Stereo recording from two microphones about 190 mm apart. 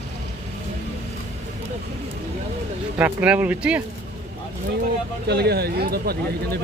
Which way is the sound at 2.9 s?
5° right (ahead or behind).